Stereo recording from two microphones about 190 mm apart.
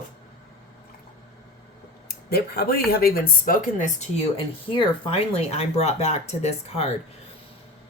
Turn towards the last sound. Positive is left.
turn(degrees=35)  # may be behind; listen again after turning